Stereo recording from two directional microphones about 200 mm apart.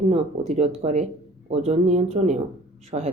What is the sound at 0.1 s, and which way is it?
Speech, 35° right (ahead or behind).